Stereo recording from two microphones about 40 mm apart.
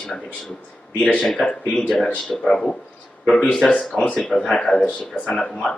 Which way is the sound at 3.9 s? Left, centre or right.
Centre.